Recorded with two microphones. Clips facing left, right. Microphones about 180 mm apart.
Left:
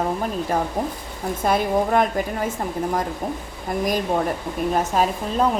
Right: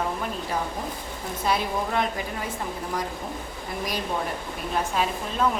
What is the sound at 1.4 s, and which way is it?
A woman's voice, 50° left (ahead or behind).